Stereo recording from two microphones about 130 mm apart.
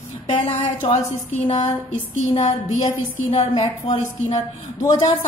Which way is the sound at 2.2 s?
65° left (ahead or behind).